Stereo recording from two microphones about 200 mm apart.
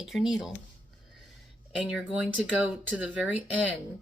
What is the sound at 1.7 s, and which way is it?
Speech, 5° right (ahead or behind).